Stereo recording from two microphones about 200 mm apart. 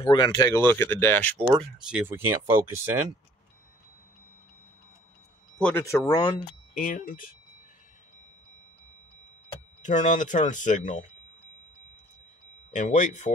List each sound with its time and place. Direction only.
0.0 s speech: 20° left (ahead or behind)
1.9 s speech: 10° right (ahead or behind)
5.6 s speech: 10° left (ahead or behind)
6.7 s speech: 45° left (ahead or behind)
9.8 s speech: 40° left (ahead or behind)
12.7 s speech: 40° left (ahead or behind)